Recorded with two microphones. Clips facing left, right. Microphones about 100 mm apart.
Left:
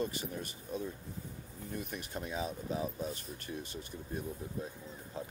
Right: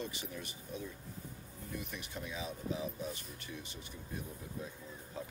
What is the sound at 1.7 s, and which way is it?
Speech, 45° left (ahead or behind).